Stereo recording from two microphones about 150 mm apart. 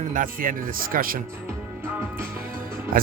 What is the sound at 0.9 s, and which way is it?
Speech, 70° right (ahead or behind).